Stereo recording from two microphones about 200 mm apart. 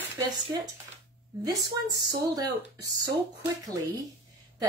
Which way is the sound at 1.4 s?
20° right (ahead or behind).